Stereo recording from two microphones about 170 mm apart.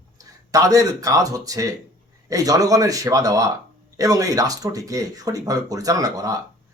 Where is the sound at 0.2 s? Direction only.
20° right (ahead or behind).